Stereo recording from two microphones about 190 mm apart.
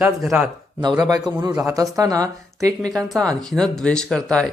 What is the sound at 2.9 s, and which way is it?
Speech, 5° left (ahead or behind).